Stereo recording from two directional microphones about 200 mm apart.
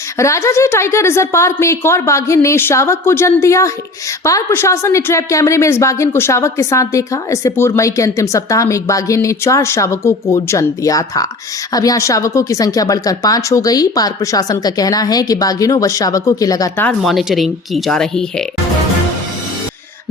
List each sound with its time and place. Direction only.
0.2 s speech: 15° left (ahead or behind)
17.0 s speech: centre (ahead or behind)